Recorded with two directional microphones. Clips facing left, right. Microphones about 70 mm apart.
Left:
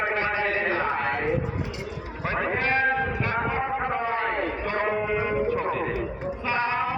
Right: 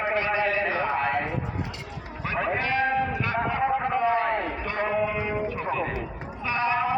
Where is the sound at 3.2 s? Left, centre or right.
Left.